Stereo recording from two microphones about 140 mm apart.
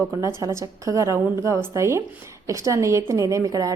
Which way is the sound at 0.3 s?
20° right (ahead or behind).